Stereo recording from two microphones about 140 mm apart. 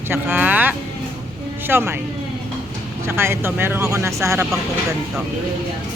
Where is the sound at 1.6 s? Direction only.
15° right (ahead or behind).